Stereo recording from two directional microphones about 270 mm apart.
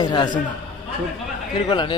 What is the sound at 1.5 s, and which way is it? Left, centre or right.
Speech, centre.